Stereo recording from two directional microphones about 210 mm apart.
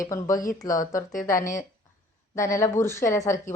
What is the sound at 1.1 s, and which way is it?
Speech, 40° left (ahead or behind).